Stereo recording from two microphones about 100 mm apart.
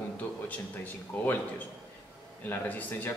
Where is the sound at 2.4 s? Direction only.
20° left (ahead or behind).